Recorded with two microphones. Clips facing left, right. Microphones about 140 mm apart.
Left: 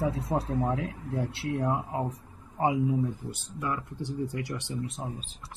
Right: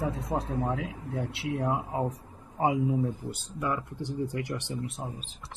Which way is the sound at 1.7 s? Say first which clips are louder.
Right 1 dB; 10° right (ahead or behind).